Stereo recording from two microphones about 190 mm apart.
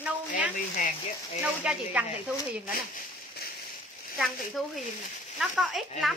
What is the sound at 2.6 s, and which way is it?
Speech, 50° left (ahead or behind).